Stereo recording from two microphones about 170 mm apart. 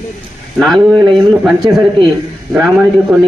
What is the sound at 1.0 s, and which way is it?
Speech, 25° right (ahead or behind).